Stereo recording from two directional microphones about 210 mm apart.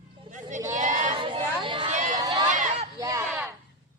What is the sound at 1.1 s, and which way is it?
Chatter, 25° right (ahead or behind).